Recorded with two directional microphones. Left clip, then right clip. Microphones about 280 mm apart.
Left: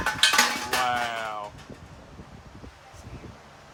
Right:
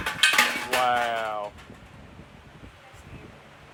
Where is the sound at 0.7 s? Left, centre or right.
Centre.